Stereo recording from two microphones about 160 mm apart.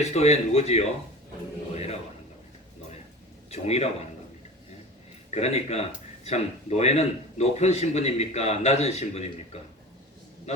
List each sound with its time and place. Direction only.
0.0 s a man's voice: 40° left (ahead or behind)
1.7 s a sound: 40° left (ahead or behind)
3.5 s a man's voice: 40° left (ahead or behind)
5.3 s a man's voice: 45° left (ahead or behind)